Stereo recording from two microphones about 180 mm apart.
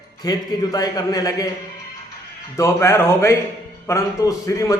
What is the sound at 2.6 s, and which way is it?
A man's voice, 15° left (ahead or behind).